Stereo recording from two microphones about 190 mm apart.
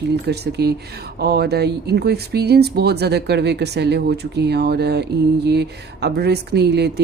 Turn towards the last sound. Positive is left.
turn(degrees=-60)  # may be behind; listen again after turning